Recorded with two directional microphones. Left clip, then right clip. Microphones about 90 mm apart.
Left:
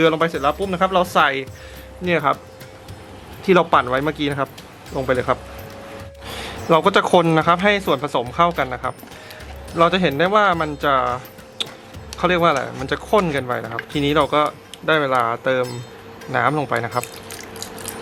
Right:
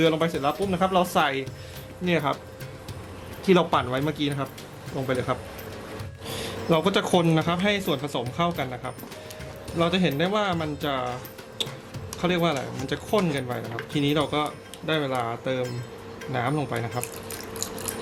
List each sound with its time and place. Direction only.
0.0 s speech: 20° left (ahead or behind)
3.4 s speech: 25° left (ahead or behind)
6.2 s speech: 20° left (ahead or behind)
11.6 s insect: 20° left (ahead or behind)
12.1 s speech: 20° left (ahead or behind)